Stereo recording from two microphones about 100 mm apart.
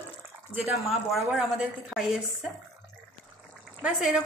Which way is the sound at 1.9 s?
5° right (ahead or behind).